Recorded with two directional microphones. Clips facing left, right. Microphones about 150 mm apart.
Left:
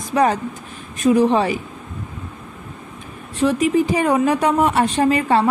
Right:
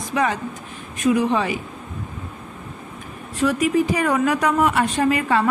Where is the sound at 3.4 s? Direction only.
25° left (ahead or behind).